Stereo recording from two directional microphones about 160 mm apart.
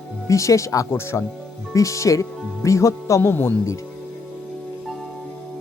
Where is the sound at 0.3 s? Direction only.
20° left (ahead or behind).